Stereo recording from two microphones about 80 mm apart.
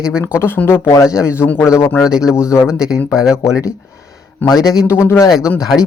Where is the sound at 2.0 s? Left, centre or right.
Centre.